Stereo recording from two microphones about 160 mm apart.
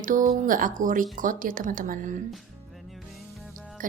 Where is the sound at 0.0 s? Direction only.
55° right (ahead or behind).